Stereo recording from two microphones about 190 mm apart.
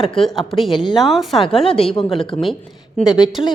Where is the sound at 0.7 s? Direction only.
25° left (ahead or behind).